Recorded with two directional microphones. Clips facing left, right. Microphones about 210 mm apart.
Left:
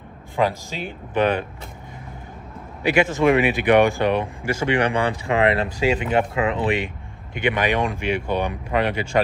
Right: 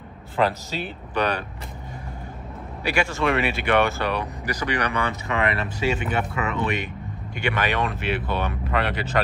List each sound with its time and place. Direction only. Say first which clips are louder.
0.4 s speech: left 1 dB; 15° left (ahead or behind)
2.8 s speech: left 6 dB; 20° left (ahead or behind)
7.3 s speech: left 4 dB; 15° left (ahead or behind)